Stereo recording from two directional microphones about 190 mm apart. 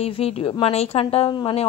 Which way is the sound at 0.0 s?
30° left (ahead or behind).